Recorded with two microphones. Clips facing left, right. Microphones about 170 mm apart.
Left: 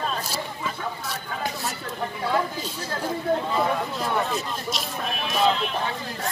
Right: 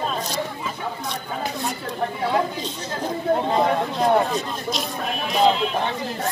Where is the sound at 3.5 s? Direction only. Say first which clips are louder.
Right 4 dB; 40° right (ahead or behind).